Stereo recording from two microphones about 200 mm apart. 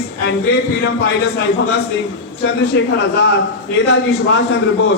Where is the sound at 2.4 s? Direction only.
55° left (ahead or behind).